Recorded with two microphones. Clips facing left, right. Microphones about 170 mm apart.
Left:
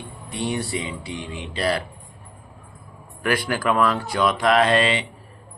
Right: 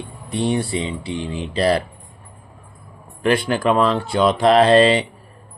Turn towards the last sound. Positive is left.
turn(degrees=-35)  # may be behind; listen again after turning